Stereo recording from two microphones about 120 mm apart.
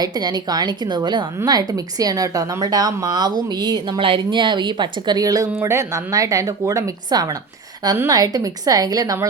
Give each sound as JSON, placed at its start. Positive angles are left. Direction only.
{"t": 0.0, "sound": "a woman's voice", "side_deg": -35}